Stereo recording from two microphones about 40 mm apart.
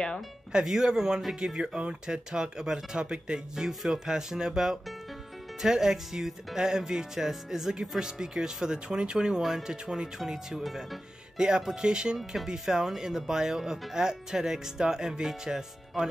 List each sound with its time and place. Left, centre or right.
0.7 s speech: centre
9.4 s speech: centre
9.7 s speech: centre
10.1 s speech: centre
11.3 s speech: centre